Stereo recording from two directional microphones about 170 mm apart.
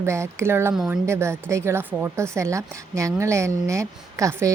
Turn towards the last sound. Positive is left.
turn(degrees=-15)  # may be behind; listen again after turning